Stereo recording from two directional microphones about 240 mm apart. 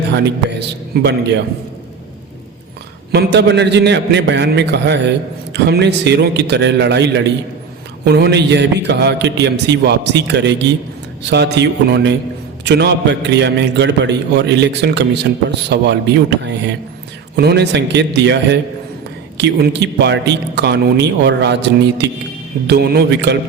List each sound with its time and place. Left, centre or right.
0.9 s a man's voice: right
3.1 s a man's voice: right